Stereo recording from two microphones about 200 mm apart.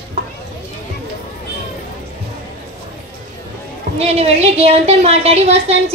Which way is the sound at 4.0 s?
30° right (ahead or behind).